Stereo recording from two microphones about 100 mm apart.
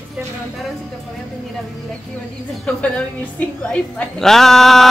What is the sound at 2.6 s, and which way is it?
A woman's voice, 15° left (ahead or behind).